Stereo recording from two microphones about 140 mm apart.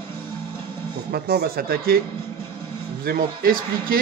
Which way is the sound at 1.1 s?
90° right.